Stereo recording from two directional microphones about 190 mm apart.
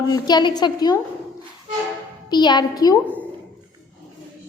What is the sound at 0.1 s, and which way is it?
Speech, 20° left (ahead or behind).